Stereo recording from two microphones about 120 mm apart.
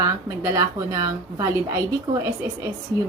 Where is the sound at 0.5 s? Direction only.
30° right (ahead or behind).